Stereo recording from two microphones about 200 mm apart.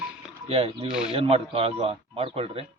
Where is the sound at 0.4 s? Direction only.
30° right (ahead or behind).